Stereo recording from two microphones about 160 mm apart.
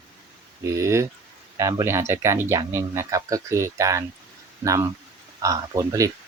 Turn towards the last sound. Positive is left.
turn(degrees=-20)  # may be behind; listen again after turning